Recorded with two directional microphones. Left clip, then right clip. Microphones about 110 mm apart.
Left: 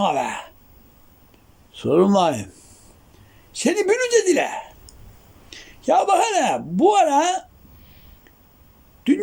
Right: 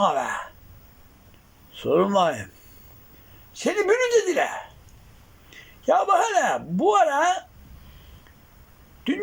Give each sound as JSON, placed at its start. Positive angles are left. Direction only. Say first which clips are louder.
{"t": 0.0, "sound": "speech", "louder": "left 1 dB", "side_deg": 25}
{"t": 1.7, "sound": "speech", "louder": "left 3 dB", "side_deg": 30}
{"t": 3.6, "sound": "speech", "louder": "left 2 dB", "side_deg": 30}
{"t": 9.1, "sound": "speech", "louder": "left 7 dB", "side_deg": 30}